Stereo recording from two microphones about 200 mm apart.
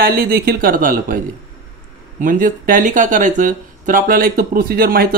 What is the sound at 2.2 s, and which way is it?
Speech, 40° right (ahead or behind).